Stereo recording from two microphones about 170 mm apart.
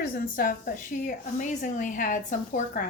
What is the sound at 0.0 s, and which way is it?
A woman's voice, 60° left (ahead or behind).